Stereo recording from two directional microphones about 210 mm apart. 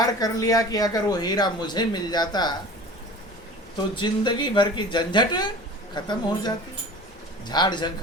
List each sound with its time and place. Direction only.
0.0 s speech: 15° left (ahead or behind)
3.9 s speech: 20° left (ahead or behind)